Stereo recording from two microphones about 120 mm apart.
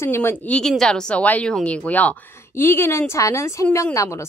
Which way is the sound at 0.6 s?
5° left (ahead or behind).